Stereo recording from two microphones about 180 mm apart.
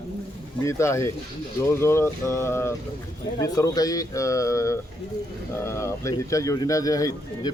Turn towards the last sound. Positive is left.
turn(degrees=20)  # may be behind; listen again after turning